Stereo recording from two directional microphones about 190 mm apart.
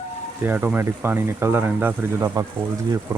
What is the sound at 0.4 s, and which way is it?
Speech, 10° right (ahead or behind).